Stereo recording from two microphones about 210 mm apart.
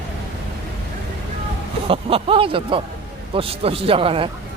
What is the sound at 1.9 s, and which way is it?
A man's voice, 25° right (ahead or behind).